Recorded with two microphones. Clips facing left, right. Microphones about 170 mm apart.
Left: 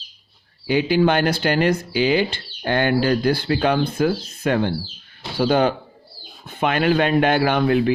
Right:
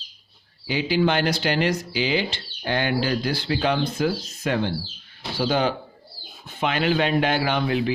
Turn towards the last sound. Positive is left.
turn(degrees=55)  # may be behind; listen again after turning